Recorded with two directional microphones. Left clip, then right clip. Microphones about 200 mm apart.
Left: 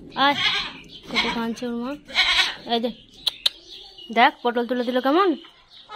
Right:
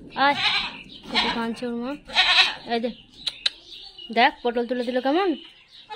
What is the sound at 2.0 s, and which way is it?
Goat, 15° right (ahead or behind).